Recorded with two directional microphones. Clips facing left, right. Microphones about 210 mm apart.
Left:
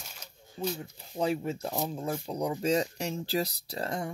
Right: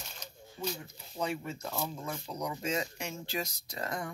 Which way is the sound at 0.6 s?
30° left (ahead or behind).